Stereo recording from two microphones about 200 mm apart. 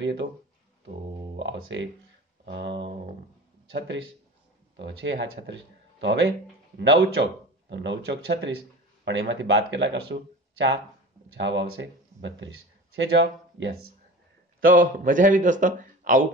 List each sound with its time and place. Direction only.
1.3 s speech: 65° right (ahead or behind)
11.3 s speech: 65° right (ahead or behind)
14.6 s a man's voice: 40° right (ahead or behind)